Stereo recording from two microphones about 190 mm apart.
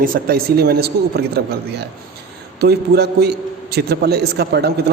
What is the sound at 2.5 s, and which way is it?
A man's voice, 55° right (ahead or behind).